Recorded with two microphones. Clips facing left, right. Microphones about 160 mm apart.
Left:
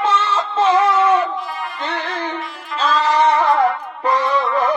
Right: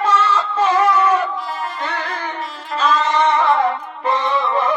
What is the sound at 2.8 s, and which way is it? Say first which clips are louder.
Singing: right 1 dB; 30° left (ahead or behind).